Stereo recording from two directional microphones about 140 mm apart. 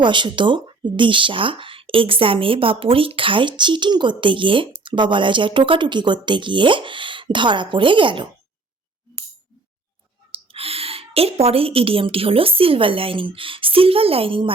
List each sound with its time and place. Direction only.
0.0 s speech: 35° right (ahead or behind)
10.3 s speech: 40° right (ahead or behind)